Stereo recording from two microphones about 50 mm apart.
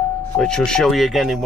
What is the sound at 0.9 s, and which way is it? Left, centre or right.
Speech, centre.